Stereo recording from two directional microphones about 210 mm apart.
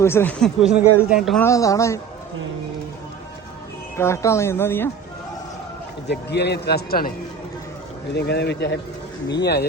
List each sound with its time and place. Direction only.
0.0 s speech: 10° left (ahead or behind)
1.4 s speech: 15° left (ahead or behind)
3.9 s speech: 15° left (ahead or behind)
6.1 s a man's voice: 50° left (ahead or behind)
8.1 s a man's voice: 55° left (ahead or behind)